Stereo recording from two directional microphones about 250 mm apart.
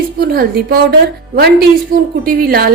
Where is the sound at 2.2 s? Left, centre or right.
Right.